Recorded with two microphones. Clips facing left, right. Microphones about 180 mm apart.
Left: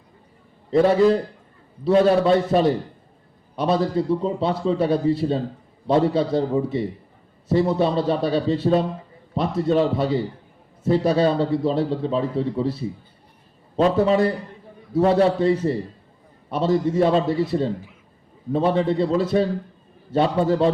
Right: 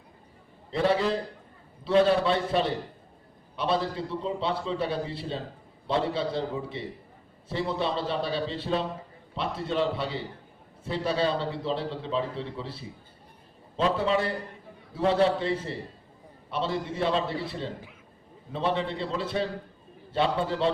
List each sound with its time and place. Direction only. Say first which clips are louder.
0.7 s a man's voice: left 9 dB; 45° left (ahead or behind)